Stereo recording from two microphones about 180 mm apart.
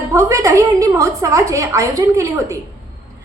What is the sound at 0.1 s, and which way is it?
A woman's voice, 15° right (ahead or behind).